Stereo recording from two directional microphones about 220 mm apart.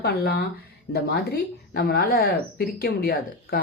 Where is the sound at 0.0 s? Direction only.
45° left (ahead or behind).